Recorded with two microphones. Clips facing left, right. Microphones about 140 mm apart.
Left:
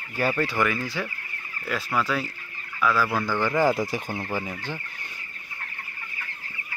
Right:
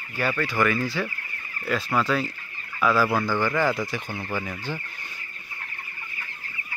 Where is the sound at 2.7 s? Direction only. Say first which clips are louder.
Right 2 dB; 25° right (ahead or behind).